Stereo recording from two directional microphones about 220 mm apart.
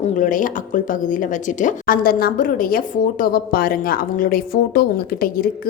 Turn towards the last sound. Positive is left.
turn(degrees=45)  # may be behind; listen again after turning